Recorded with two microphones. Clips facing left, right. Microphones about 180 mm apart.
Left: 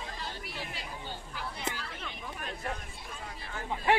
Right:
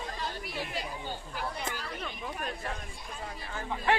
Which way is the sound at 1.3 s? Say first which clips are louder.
Right 1 dB; 45° right (ahead or behind).